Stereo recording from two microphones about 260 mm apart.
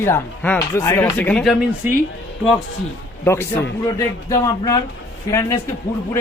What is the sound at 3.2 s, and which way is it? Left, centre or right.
A man's voice, centre.